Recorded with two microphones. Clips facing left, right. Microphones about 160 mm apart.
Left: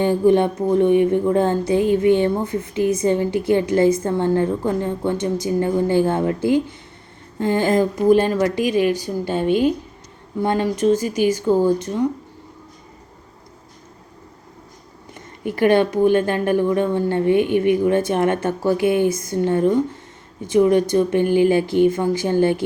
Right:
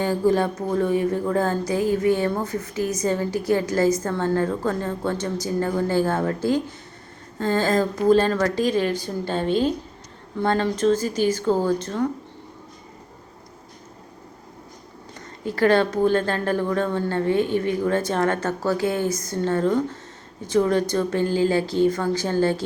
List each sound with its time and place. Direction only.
0.0 s a woman's voice: 20° left (ahead or behind)
15.4 s a woman's voice: 15° left (ahead or behind)